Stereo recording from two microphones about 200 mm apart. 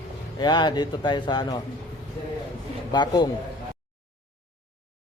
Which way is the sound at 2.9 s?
20° left (ahead or behind).